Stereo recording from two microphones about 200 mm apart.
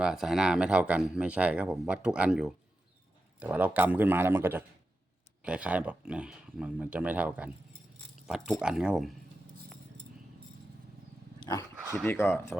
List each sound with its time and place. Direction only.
0.0 s speech: centre (ahead or behind)
11.3 s dog: 15° left (ahead or behind)
11.8 s dog: 10° right (ahead or behind)
12.0 s speech: 10° left (ahead or behind)